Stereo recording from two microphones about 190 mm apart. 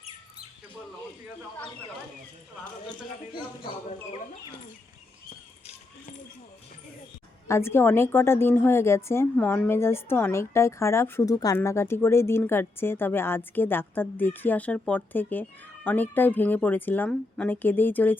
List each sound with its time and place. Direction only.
7.4 s a woman's voice: 15° left (ahead or behind)